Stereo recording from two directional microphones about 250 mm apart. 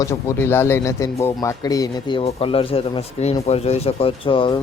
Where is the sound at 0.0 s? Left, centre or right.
Centre.